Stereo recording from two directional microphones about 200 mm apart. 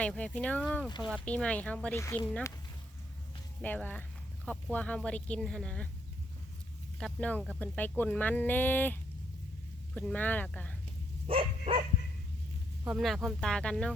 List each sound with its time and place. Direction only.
0.0 s speech: 5° left (ahead or behind)
3.6 s speech: 10° left (ahead or behind)
7.0 s speech: 5° left (ahead or behind)
11.3 s dog: 25° right (ahead or behind)
12.8 s speech: centre (ahead or behind)